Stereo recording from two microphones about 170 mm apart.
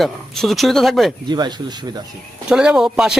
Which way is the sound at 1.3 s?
25° right (ahead or behind).